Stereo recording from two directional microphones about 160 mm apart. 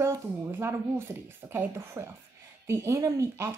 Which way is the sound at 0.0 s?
15° right (ahead or behind).